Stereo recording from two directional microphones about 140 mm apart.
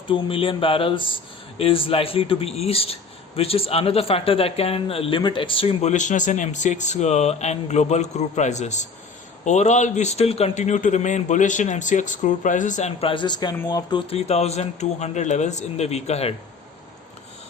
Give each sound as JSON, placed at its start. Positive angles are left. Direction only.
{"t": 0.1, "sound": "a man's voice", "side_deg": 40}
{"t": 14.3, "sound": "a man's voice", "side_deg": 50}